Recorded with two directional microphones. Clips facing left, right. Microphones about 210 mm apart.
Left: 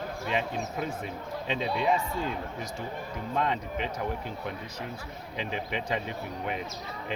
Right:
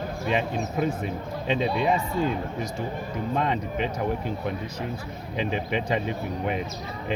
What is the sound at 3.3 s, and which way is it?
Speech, 15° right (ahead or behind).